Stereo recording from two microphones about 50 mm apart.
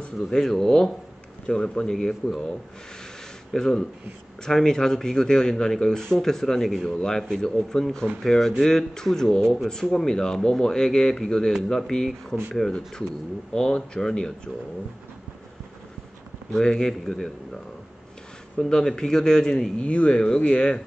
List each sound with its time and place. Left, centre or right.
0.0 s speech: centre
3.5 s speech: centre
16.5 s speech: centre
18.6 s speech: centre
19.9 s speech: left